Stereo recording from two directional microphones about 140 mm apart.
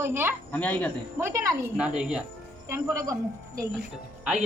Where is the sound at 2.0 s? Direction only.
5° right (ahead or behind).